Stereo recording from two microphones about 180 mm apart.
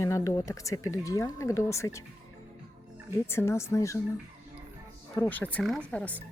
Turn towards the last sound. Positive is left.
turn(degrees=10)  # may be behind; listen again after turning